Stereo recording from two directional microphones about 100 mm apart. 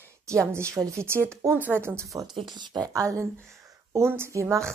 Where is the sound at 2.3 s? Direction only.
50° right (ahead or behind).